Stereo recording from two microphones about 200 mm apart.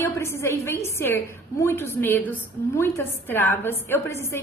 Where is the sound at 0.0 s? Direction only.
10° left (ahead or behind).